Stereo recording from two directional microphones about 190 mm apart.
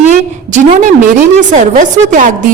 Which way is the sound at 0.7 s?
45° right (ahead or behind).